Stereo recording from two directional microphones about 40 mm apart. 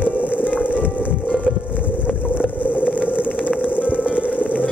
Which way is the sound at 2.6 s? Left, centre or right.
Left.